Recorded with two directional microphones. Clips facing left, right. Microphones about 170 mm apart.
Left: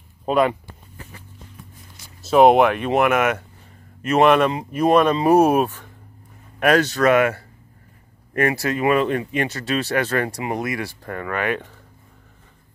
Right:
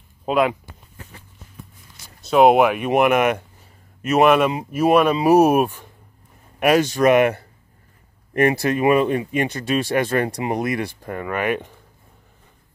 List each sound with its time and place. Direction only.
0.2 s speech: centre (ahead or behind)
2.2 s speech: centre (ahead or behind); by 3.4 s 20° right (ahead or behind)
4.1 s speech: 5° right (ahead or behind)